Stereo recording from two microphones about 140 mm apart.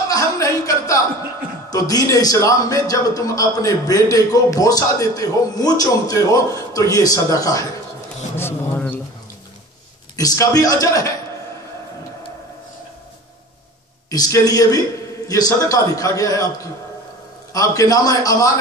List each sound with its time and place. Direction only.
0.1 s a sound: 25° left (ahead or behind)
1.7 s a man's voice: 25° left (ahead or behind)
8.4 s speech: 15° left (ahead or behind)
10.1 s a man's voice: 25° left (ahead or behind)
14.1 s a man's voice: 25° left (ahead or behind)
17.5 s a man's voice: 25° left (ahead or behind)